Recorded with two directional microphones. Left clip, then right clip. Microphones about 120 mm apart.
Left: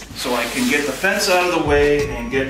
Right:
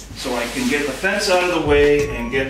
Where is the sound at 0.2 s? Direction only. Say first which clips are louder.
Left 2 dB; 35° left (ahead or behind).